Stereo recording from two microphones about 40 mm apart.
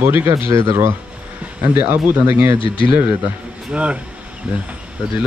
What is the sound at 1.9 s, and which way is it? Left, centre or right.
Speech, right.